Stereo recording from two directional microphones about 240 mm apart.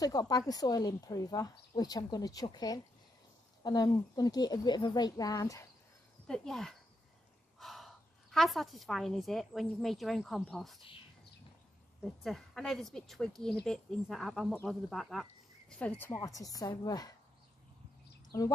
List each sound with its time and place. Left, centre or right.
0.0 s speech: centre
6.2 s a woman's voice: centre
12.0 s speech: centre
18.3 s speech: centre